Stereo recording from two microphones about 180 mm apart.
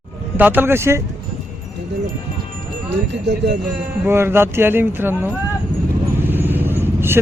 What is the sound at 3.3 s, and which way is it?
Speech, 80° right.